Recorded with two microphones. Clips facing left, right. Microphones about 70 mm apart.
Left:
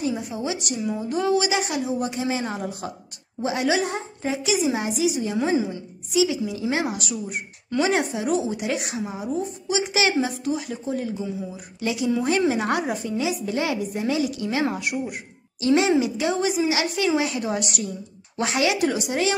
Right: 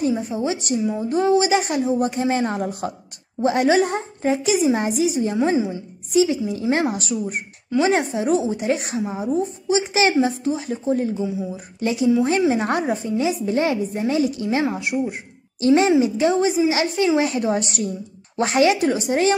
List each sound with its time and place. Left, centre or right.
0.1 s a woman's voice: right
15.6 s a woman's voice: right